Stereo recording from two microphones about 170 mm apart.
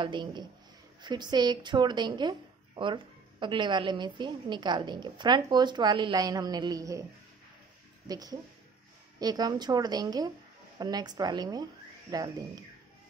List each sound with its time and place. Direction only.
0.0 s speech: 25° right (ahead or behind)
8.1 s speech: 20° right (ahead or behind)